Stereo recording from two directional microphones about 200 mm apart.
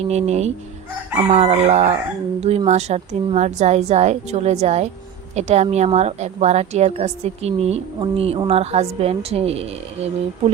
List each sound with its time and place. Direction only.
0.1 s a woman's voice: 35° right (ahead or behind)